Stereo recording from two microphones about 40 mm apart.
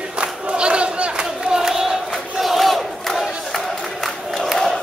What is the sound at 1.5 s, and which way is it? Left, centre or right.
Battle cry, centre.